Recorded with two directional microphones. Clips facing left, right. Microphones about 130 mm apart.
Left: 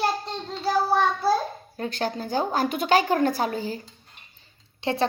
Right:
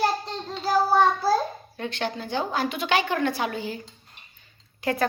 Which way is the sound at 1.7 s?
40° left (ahead or behind).